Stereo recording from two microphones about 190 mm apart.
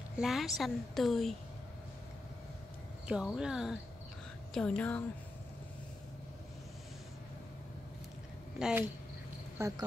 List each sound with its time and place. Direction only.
0.2 s a woman's voice: centre (ahead or behind)
3.1 s a woman's voice: 5° right (ahead or behind)
8.5 s speech: 5° right (ahead or behind)
9.6 s speech: 15° right (ahead or behind)